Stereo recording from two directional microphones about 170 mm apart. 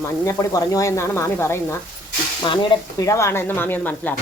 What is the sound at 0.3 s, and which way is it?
Speech, 20° left (ahead or behind).